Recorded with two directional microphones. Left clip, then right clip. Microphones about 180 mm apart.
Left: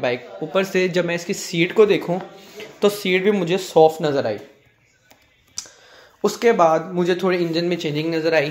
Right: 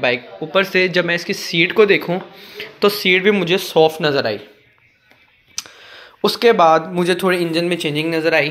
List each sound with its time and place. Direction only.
0.0 s speech: centre (ahead or behind)
5.6 s a sound: 15° right (ahead or behind)
6.6 s speech: 5° right (ahead or behind)